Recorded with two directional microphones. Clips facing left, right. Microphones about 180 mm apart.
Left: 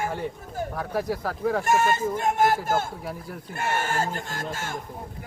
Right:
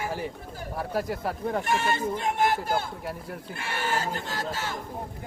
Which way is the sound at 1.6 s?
45° left (ahead or behind).